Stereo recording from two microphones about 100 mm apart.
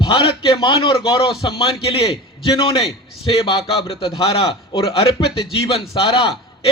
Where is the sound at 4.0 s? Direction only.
65° left (ahead or behind).